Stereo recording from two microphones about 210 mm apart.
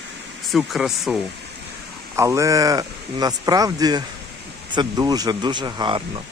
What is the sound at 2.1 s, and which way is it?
Speech, 15° right (ahead or behind).